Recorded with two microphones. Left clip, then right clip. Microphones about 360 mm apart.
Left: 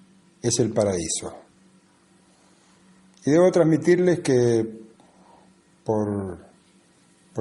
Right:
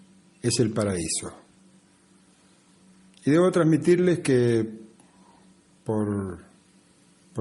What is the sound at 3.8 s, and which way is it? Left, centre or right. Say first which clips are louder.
Speech: left 2 dB; centre.